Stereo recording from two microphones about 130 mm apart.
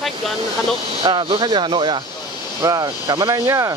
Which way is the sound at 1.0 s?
35° right (ahead or behind).